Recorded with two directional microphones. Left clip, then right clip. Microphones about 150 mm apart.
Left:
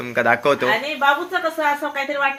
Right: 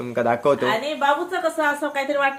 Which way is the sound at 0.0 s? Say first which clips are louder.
Left 3 dB; 5° right (ahead or behind).